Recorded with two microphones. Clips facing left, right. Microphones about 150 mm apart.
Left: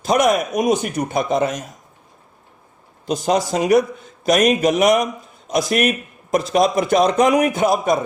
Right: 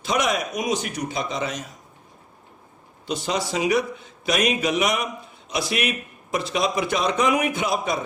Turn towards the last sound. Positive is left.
turn(degrees=50)  # may be behind; listen again after turning